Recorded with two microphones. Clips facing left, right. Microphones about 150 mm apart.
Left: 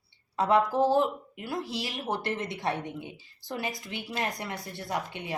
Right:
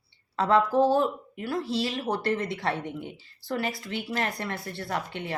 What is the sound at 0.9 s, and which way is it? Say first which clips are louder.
Speech: right 1 dB; 20° left (ahead or behind).